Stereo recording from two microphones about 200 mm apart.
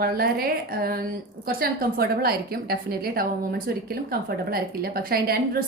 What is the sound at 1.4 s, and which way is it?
A woman's voice, 50° right (ahead or behind).